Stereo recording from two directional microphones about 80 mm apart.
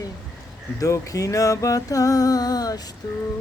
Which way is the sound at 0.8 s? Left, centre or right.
Left.